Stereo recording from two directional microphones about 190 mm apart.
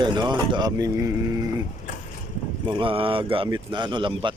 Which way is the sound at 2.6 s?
25° right (ahead or behind).